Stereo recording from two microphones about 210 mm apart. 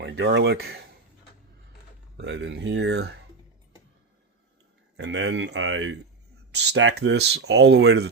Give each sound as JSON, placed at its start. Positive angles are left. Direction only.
{"t": 0.0, "sound": "speech", "side_deg": -55}
{"t": 2.1, "sound": "speech", "side_deg": -55}
{"t": 4.9, "sound": "speech", "side_deg": -55}